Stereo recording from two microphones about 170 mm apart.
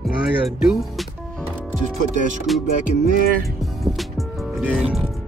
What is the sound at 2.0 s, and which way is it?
Music, 45° right (ahead or behind).